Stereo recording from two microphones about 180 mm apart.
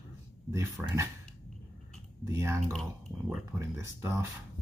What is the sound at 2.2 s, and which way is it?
Speech, 15° right (ahead or behind).